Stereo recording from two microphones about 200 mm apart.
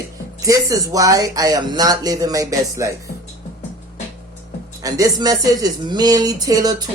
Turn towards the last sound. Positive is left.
turn(degrees=-20)  # may be behind; listen again after turning